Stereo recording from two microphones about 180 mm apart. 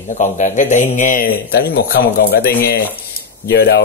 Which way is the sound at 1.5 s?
60° left (ahead or behind).